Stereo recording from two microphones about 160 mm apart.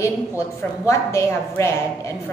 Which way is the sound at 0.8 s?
15° left (ahead or behind).